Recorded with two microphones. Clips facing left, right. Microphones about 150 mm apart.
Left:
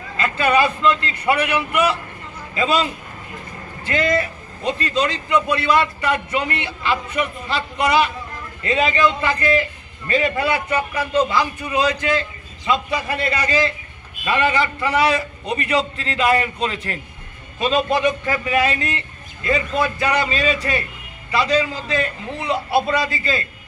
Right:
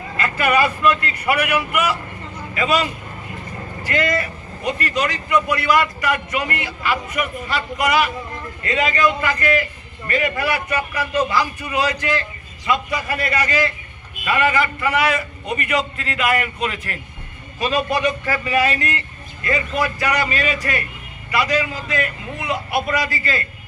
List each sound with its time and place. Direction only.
0.2 s speech: 25° left (ahead or behind)
3.8 s speech: 25° left (ahead or behind)